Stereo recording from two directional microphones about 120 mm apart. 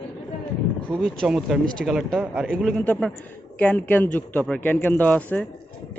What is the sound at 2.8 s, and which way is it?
A man's voice, 10° left (ahead or behind).